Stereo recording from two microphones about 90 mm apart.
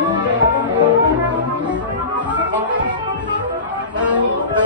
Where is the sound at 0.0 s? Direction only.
60° right (ahead or behind).